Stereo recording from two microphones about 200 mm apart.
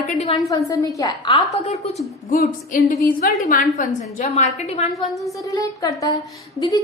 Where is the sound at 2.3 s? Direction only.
45° left (ahead or behind).